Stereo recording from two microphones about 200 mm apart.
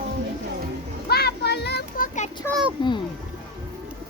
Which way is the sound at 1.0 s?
55° left (ahead or behind).